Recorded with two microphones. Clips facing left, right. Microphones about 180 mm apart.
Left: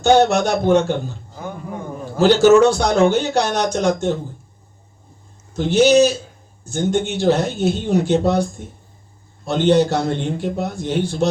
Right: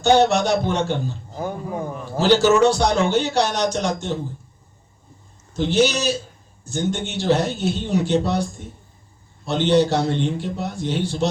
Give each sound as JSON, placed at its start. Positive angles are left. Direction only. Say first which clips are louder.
{"t": 0.0, "sound": "speech", "louder": "left 2 dB", "side_deg": 50}
{"t": 2.1, "sound": "speech", "louder": "left 4 dB", "side_deg": 50}
{"t": 5.5, "sound": "speech", "louder": "left 6 dB", "side_deg": 50}